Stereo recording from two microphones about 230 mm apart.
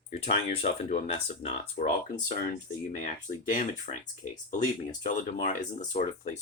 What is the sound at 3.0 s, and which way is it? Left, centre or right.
Speech, left.